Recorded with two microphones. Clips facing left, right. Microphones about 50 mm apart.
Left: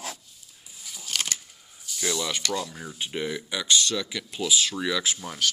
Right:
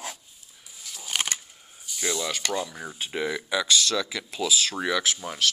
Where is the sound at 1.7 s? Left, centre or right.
Centre.